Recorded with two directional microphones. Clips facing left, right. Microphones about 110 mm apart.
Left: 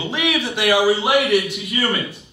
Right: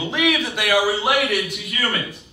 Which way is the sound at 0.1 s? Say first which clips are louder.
Right 1 dB; 5° left (ahead or behind).